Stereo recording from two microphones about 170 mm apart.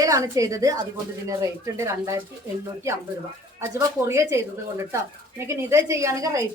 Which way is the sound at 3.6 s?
15° right (ahead or behind).